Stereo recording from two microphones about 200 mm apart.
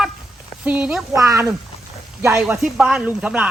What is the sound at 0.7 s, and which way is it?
Speech, 5° right (ahead or behind).